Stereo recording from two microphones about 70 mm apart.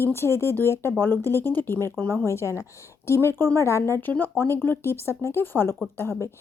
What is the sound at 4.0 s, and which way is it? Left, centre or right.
A woman's voice, left.